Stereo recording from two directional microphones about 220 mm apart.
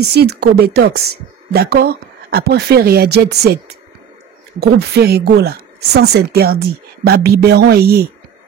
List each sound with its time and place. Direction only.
0.0 s speech: 45° right (ahead or behind)
4.6 s speech: 45° right (ahead or behind)